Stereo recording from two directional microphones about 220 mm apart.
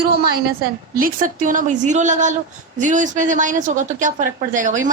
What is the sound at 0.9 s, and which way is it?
A woman's voice, 40° right (ahead or behind).